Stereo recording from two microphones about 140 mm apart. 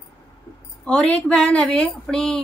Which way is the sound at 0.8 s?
10° left (ahead or behind).